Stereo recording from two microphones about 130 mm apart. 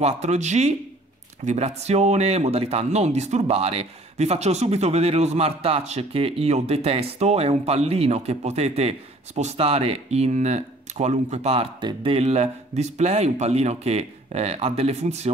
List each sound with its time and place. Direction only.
0.0 s speech: 60° right (ahead or behind)